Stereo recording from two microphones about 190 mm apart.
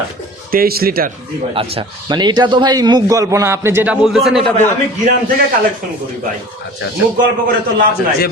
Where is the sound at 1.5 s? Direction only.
30° right (ahead or behind); by 4.4 s centre (ahead or behind).